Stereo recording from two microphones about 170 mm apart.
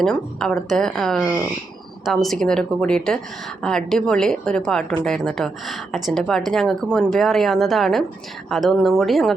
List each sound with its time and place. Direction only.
0.0 s a woman's voice: 5° left (ahead or behind)